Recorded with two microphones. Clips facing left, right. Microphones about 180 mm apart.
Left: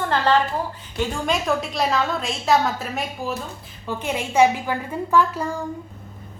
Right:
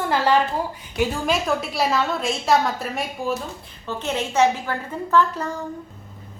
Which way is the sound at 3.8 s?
10° left (ahead or behind).